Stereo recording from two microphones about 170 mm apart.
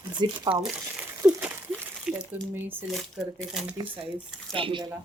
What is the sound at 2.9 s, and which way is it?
Speech, centre (ahead or behind).